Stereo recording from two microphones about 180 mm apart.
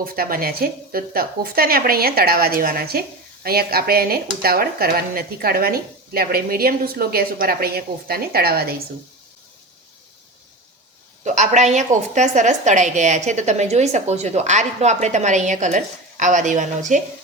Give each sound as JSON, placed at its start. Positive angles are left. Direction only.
{"t": 0.0, "sound": "speech", "side_deg": -55}
{"t": 11.2, "sound": "a woman's voice", "side_deg": -40}